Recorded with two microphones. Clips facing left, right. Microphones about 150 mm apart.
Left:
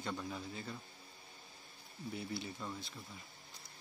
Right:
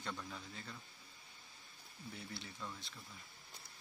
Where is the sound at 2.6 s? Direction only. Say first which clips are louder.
Left 4 dB; 10° left (ahead or behind).